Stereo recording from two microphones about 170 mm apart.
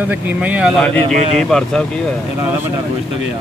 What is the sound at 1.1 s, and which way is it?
Speech, 40° right (ahead or behind).